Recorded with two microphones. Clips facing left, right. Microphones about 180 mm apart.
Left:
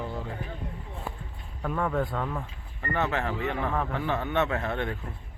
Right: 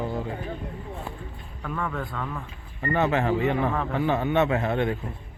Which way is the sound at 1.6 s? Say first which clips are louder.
Left 3 dB; 25° left (ahead or behind).